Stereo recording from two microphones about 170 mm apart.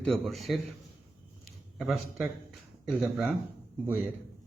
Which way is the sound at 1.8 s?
Centre (ahead or behind).